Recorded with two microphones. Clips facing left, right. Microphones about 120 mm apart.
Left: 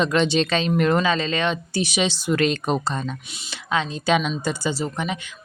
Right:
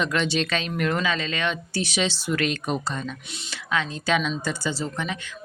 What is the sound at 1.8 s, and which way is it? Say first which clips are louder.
Speech: left 3 dB; 15° left (ahead or behind).